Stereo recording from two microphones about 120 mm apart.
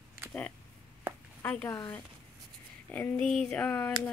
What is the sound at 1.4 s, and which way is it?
Speech, 20° left (ahead or behind).